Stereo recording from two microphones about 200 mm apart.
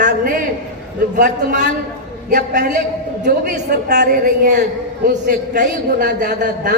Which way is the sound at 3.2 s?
55° right (ahead or behind).